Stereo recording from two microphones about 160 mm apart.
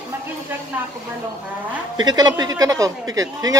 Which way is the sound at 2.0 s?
25° right (ahead or behind).